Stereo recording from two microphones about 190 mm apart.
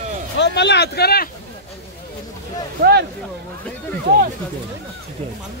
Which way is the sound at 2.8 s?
55° right (ahead or behind).